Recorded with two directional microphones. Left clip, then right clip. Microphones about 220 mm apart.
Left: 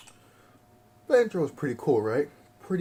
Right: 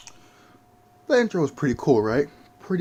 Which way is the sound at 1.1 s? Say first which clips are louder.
Right 2 dB; 40° right (ahead or behind).